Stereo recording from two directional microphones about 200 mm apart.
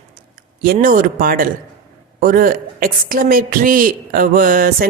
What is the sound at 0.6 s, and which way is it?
A woman's voice, 45° right (ahead or behind).